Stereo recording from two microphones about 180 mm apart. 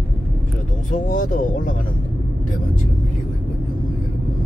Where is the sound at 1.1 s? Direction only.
50° left (ahead or behind).